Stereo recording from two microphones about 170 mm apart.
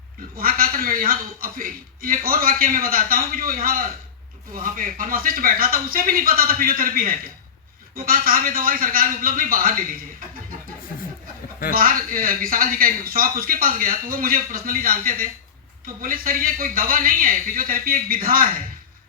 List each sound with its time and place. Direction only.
0.3 s speech: 60° right (ahead or behind)
11.7 s speech: 55° right (ahead or behind)